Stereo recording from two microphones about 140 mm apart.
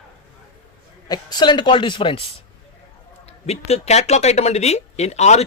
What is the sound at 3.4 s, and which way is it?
A man's voice, 50° left (ahead or behind).